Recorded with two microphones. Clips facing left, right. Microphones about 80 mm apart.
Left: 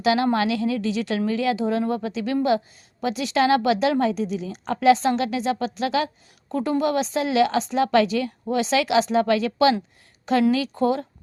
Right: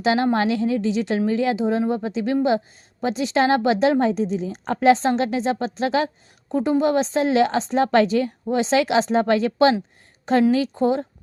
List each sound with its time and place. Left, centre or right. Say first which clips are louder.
0.0 s a woman's voice: right 1 dB; right
6.5 s a woman's voice: right 3 dB; right